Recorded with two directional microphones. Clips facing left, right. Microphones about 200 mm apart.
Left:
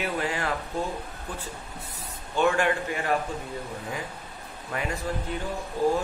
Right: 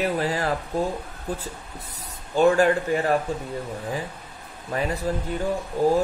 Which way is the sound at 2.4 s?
35° right (ahead or behind).